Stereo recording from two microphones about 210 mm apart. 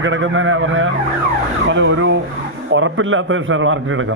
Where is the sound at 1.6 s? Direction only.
60° right (ahead or behind).